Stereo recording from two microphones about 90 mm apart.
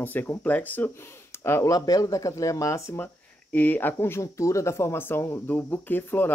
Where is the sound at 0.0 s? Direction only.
20° left (ahead or behind).